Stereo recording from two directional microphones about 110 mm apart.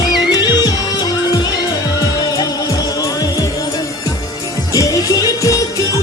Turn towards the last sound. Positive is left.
turn(degrees=30)  # may be behind; listen again after turning